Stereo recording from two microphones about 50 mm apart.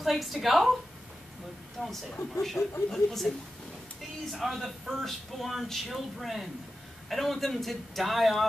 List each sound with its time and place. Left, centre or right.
0.0 s a man's voice: centre
1.8 s a man's voice: centre
2.6 s speech: left
2.9 s a man's voice: centre